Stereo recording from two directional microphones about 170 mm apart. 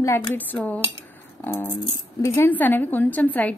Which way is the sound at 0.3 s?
10° left (ahead or behind).